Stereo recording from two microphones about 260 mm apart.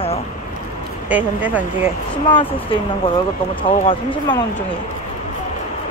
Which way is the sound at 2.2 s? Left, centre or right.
Centre.